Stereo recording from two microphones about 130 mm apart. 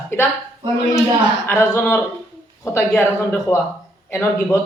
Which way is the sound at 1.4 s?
20° left (ahead or behind).